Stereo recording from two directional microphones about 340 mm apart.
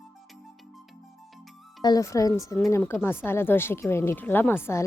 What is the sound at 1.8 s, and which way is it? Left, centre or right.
Speech, centre.